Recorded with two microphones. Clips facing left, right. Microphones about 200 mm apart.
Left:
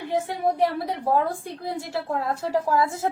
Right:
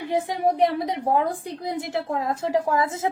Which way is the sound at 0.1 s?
15° right (ahead or behind).